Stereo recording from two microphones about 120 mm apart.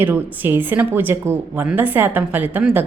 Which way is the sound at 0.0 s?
15° right (ahead or behind).